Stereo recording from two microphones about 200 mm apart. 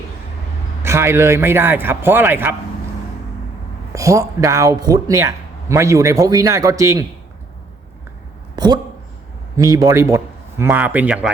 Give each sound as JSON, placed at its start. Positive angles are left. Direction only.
{"t": 0.8, "sound": "speech", "side_deg": -10}
{"t": 3.9, "sound": "speech", "side_deg": -15}
{"t": 8.5, "sound": "a sound", "side_deg": -20}
{"t": 9.6, "sound": "speech", "side_deg": -15}